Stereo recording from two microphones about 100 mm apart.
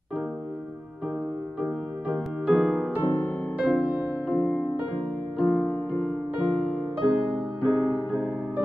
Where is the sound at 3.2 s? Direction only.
25° left (ahead or behind).